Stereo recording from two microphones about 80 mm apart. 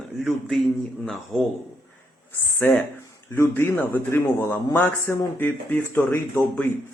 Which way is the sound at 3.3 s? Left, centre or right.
Left.